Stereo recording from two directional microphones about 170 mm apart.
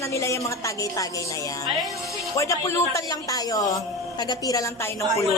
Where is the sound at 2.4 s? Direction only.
15° left (ahead or behind).